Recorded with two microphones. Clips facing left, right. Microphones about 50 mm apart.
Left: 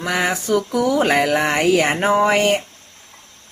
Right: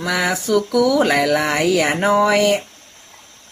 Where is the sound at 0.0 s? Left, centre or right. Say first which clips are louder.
Right 1 dB; left.